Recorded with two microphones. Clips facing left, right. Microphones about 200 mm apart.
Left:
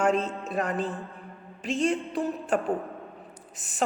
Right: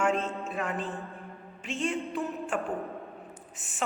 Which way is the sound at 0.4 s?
40° left (ahead or behind).